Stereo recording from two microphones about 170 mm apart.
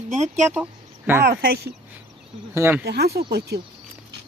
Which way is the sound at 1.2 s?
65° right (ahead or behind).